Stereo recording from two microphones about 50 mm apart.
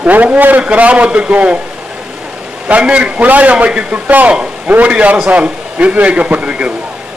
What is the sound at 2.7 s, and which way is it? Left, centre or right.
A man's voice, right.